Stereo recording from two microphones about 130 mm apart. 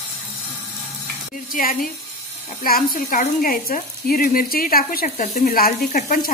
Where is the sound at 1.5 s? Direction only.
90° left.